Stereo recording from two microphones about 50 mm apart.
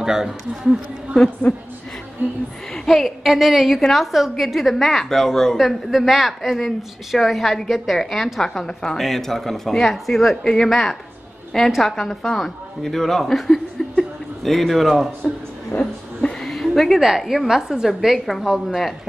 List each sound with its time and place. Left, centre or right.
0.0 s a man's voice: centre
1.5 s a woman's voice: centre
2.7 s a woman's voice: centre
13.8 s chuckle: centre
14.4 s a woman's voice: centre
15.7 s a woman's voice: left
16.3 s a sound: centre
17.2 s a woman's voice: centre